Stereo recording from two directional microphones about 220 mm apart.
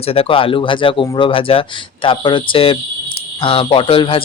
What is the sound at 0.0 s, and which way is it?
Speech, 25° left (ahead or behind).